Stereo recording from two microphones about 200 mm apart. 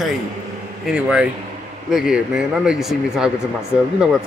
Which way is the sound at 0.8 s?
5° right (ahead or behind).